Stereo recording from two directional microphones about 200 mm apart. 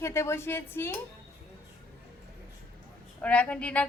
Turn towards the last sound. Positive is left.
turn(degrees=5)  # may be behind; listen again after turning